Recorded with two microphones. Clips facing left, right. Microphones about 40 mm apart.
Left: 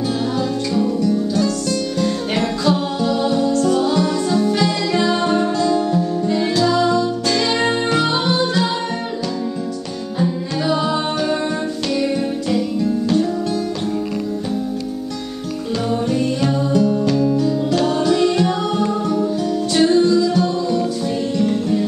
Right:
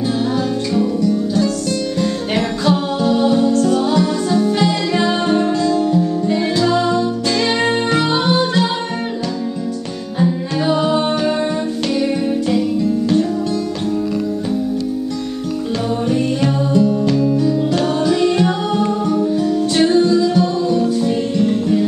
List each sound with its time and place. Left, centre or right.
1.0 s music: centre
7.2 s music: centre
10.1 s music: centre
16.1 s music: centre